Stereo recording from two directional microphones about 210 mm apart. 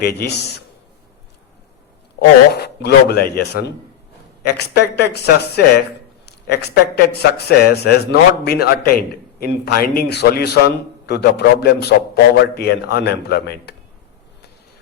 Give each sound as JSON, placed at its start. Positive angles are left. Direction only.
{"t": 0.0, "sound": "a man's voice", "side_deg": 50}
{"t": 2.5, "sound": "a man's voice", "side_deg": 50}